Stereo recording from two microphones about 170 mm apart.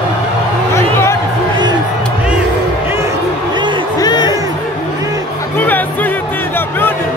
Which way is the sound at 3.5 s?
25° right (ahead or behind).